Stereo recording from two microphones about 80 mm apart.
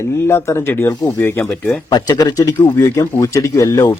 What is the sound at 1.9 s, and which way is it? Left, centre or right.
Speech, left.